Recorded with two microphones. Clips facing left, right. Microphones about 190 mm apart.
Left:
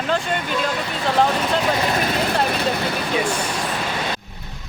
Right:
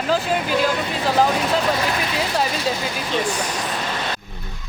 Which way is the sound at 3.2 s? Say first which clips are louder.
Right 1 dB; 10° left (ahead or behind).